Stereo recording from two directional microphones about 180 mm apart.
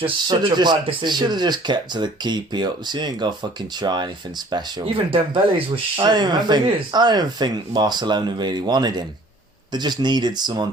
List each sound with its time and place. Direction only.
0.0 s speech: 25° right (ahead or behind)